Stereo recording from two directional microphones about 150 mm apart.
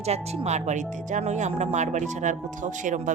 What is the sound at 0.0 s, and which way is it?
A woman's voice, 45° right (ahead or behind).